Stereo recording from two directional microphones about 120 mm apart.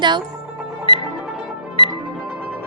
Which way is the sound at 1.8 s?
45° left (ahead or behind).